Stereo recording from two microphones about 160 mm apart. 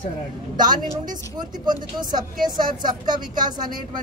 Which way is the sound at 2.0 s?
25° right (ahead or behind).